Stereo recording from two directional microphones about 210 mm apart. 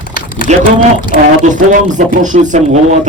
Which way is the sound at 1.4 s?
35° right (ahead or behind).